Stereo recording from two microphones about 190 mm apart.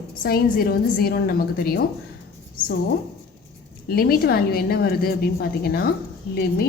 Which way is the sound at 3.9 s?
55° left (ahead or behind).